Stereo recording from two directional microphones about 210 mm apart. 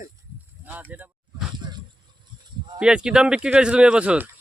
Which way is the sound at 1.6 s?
20° right (ahead or behind).